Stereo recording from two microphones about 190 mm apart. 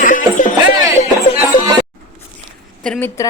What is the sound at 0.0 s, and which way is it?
Music, 45° left (ahead or behind).